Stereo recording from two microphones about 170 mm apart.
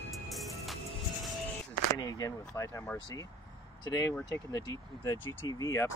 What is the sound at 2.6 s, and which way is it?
Speech, 20° left (ahead or behind).